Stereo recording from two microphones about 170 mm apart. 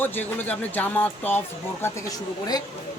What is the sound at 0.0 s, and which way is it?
Speech, 10° left (ahead or behind).